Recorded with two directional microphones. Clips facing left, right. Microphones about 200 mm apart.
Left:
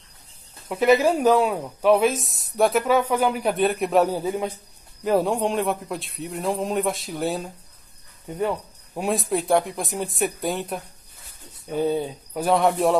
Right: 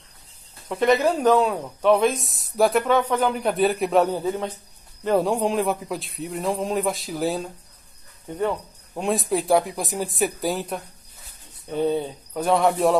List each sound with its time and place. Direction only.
0.7 s speech: 5° left (ahead or behind)